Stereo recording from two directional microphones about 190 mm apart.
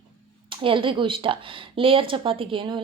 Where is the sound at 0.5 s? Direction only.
25° right (ahead or behind).